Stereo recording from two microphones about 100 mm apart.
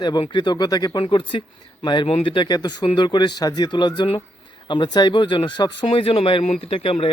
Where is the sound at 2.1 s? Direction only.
85° left.